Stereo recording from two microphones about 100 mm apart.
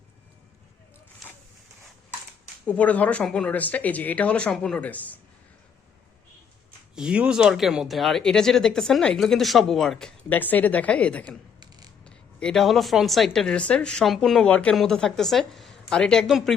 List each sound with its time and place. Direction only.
2.6 s speech: 15° left (ahead or behind)
6.9 s speech: 10° right (ahead or behind)
10.2 s speech: 15° left (ahead or behind)
11.3 s a sound: 45° right (ahead or behind)
12.0 s speech: 10° left (ahead or behind)